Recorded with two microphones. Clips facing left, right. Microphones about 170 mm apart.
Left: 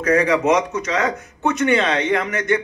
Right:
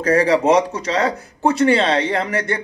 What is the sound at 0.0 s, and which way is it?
A man's voice, 35° right (ahead or behind).